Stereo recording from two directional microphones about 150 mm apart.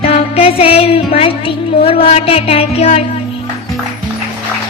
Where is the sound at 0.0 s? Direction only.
40° left (ahead or behind).